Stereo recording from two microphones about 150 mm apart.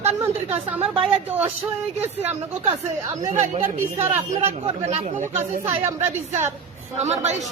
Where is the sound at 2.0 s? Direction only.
10° right (ahead or behind).